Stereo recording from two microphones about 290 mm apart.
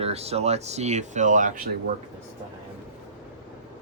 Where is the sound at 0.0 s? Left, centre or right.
Right.